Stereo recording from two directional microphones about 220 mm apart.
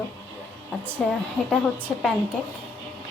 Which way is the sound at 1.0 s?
Centre (ahead or behind).